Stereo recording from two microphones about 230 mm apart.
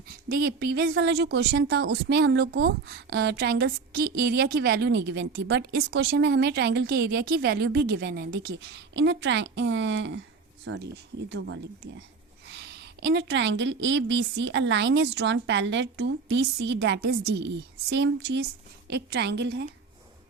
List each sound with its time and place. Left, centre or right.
0.1 s speech: right